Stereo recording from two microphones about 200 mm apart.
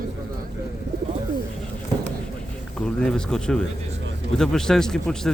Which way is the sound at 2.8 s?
5° left (ahead or behind).